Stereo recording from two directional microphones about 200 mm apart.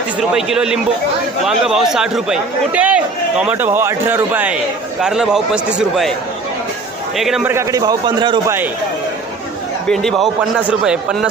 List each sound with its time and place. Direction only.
0.2 s a man's voice: 5° right (ahead or behind)
7.2 s a man's voice: centre (ahead or behind)
7.5 s a man's voice: 15° right (ahead or behind)
9.9 s a man's voice: centre (ahead or behind)